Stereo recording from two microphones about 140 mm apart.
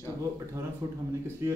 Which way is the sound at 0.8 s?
25° right (ahead or behind).